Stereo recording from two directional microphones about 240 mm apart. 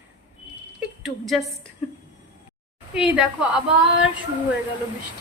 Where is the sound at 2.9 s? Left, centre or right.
Centre.